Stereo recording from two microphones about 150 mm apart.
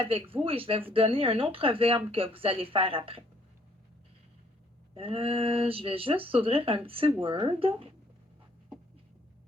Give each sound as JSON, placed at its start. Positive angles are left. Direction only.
{"t": 0.0, "sound": "speech", "side_deg": -40}
{"t": 4.9, "sound": "speech", "side_deg": -40}